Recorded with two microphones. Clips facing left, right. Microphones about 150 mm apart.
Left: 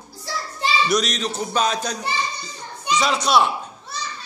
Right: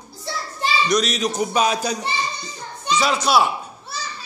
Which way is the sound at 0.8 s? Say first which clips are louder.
Right 1 dB; centre (ahead or behind).